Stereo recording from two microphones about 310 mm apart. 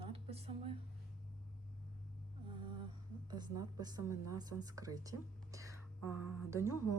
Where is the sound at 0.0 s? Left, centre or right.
Centre.